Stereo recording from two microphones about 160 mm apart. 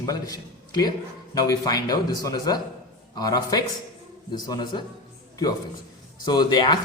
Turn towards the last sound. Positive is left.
turn(degrees=25)  # may be behind; listen again after turning